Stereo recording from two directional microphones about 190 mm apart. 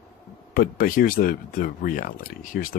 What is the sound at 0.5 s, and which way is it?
Speech, 50° left (ahead or behind).